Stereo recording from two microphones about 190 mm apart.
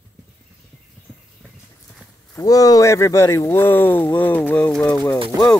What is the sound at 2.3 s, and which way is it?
Speech, 20° left (ahead or behind).